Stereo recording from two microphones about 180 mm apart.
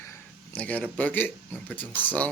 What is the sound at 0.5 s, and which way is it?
Speech, 10° left (ahead or behind).